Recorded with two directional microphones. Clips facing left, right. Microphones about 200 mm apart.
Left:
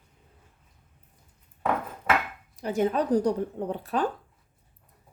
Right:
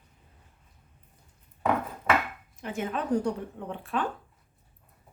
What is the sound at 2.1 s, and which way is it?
Dishes, centre (ahead or behind).